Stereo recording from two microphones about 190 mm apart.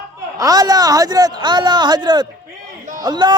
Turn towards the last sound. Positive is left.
turn(degrees=-20)  # may be behind; listen again after turning